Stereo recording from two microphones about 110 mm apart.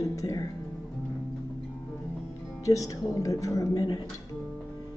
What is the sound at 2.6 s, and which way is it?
A woman's voice, 30° left (ahead or behind).